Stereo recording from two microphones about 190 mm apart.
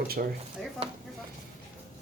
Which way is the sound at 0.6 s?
Centre (ahead or behind).